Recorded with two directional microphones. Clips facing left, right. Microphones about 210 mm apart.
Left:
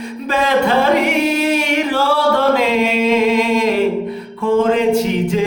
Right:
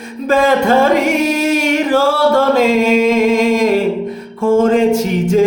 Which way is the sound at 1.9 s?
45° right (ahead or behind).